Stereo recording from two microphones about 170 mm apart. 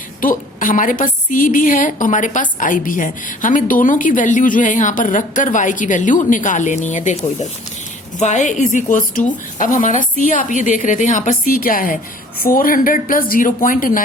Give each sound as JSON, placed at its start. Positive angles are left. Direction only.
{"t": 0.2, "sound": "a woman's voice", "side_deg": 55}
{"t": 8.2, "sound": "a woman's voice", "side_deg": 45}